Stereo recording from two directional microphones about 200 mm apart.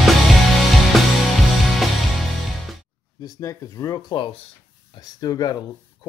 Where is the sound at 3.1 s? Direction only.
20° left (ahead or behind).